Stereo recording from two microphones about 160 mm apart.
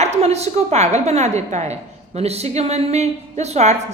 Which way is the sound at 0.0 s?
45° right (ahead or behind).